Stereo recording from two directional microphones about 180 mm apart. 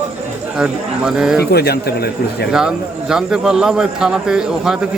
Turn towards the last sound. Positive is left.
turn(degrees=-5)  # may be behind; listen again after turning